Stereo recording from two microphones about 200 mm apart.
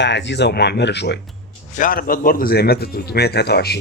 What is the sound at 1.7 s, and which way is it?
Speech, 45° left (ahead or behind).